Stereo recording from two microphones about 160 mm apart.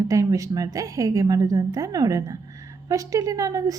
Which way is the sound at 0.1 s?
20° right (ahead or behind).